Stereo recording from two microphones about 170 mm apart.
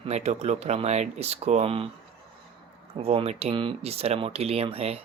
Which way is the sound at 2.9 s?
35° right (ahead or behind).